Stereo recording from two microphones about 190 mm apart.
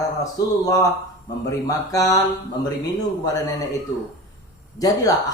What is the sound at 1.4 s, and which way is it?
Speech, 20° left (ahead or behind).